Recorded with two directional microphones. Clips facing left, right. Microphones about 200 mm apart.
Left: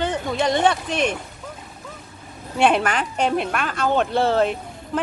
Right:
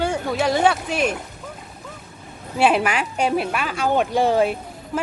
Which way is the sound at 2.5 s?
5° right (ahead or behind).